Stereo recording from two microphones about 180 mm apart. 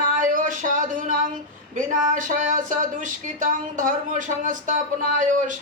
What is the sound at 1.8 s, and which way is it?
Speech, 45° right (ahead or behind).